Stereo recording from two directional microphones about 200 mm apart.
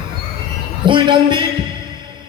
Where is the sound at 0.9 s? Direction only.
25° right (ahead or behind).